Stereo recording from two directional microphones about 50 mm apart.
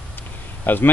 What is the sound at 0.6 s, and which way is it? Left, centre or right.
Speech, left.